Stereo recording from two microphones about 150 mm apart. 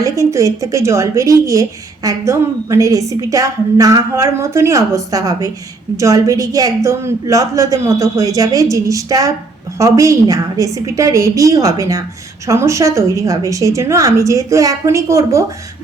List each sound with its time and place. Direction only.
0.0 s a woman's voice: 20° right (ahead or behind)